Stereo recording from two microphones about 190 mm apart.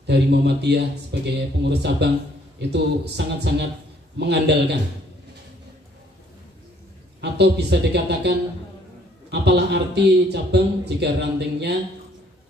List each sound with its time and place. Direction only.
0.0 s a man's voice: 60° right (ahead or behind)
7.2 s a man's voice: 60° right (ahead or behind)